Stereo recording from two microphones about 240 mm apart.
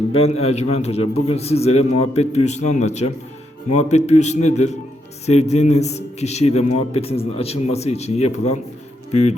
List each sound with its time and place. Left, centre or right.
0.1 s a man's voice: left